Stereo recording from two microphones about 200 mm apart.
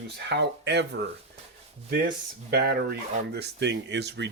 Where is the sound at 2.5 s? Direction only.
55° right (ahead or behind).